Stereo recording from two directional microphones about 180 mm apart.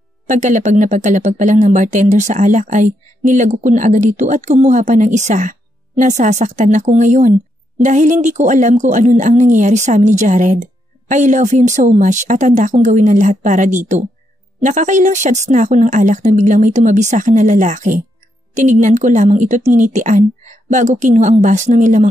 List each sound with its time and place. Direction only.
0.3 s speech: 40° right (ahead or behind)